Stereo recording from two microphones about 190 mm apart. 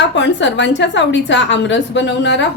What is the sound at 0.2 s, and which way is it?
A woman's voice, 70° left (ahead or behind).